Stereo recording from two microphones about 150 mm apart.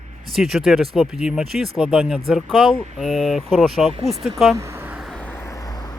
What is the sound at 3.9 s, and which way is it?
Speech, 40° right (ahead or behind).